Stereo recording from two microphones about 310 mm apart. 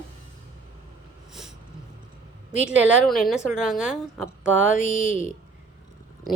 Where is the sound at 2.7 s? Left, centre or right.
Centre.